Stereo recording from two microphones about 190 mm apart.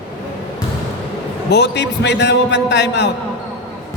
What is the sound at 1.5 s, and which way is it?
A man's voice, 65° left (ahead or behind).